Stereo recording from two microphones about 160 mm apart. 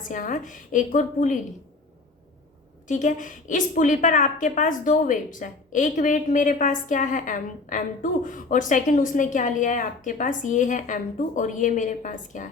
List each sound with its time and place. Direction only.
0.0 s a woman's voice: 55° left (ahead or behind)
2.8 s a woman's voice: 50° left (ahead or behind)